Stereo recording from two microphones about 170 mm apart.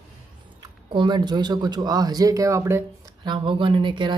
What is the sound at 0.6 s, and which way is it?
Speech, 25° right (ahead or behind).